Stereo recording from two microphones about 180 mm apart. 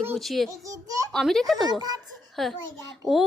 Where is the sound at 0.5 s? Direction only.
20° right (ahead or behind).